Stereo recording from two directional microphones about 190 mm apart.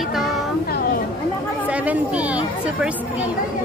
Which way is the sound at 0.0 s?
Centre (ahead or behind).